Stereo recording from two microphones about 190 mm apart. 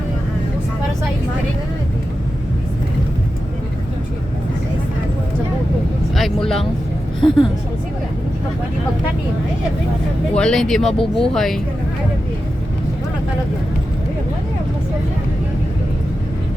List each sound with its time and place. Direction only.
6.1 s vehicle: centre (ahead or behind)
7.2 s speech: 25° left (ahead or behind)
10.3 s speech: 5° left (ahead or behind)